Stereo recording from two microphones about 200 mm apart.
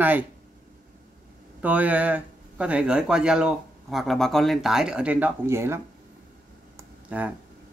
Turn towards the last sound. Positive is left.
turn(degrees=-10)  # may be behind; listen again after turning